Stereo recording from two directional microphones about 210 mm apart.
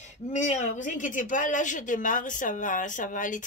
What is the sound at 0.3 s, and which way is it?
Speech, 35° left (ahead or behind).